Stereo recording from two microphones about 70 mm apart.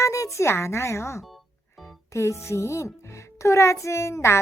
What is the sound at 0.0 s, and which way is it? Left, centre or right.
A child's voice, left.